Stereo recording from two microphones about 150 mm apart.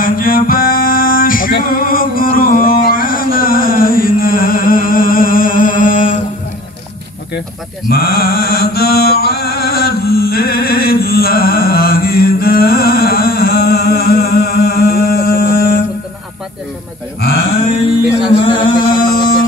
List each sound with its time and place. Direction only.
0.0 s music: 70° left (ahead or behind)
7.9 s mantra: 90° left
18.4 s music: 30° left (ahead or behind)
18.9 s music: 80° left